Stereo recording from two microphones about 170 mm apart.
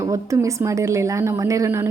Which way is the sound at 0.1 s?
20° right (ahead or behind).